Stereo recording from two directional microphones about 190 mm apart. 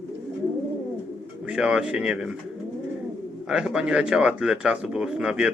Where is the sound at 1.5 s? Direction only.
5° right (ahead or behind).